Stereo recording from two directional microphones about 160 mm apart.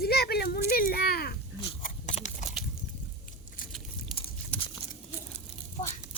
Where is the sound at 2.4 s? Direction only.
45° left (ahead or behind).